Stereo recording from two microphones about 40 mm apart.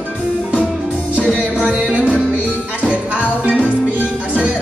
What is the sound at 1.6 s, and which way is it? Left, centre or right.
Music, right.